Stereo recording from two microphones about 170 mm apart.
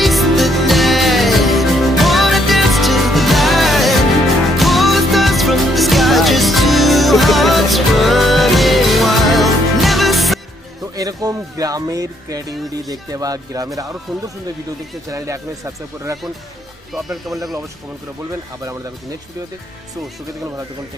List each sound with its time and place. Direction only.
0.0 s music: centre (ahead or behind)
10.9 s speech: 20° right (ahead or behind)
14.1 s speech: centre (ahead or behind)
15.1 s speech: 20° right (ahead or behind)
16.9 s speech: centre (ahead or behind)